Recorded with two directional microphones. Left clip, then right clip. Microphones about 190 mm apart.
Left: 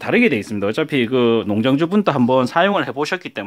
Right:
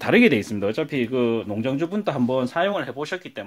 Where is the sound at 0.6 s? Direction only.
25° left (ahead or behind).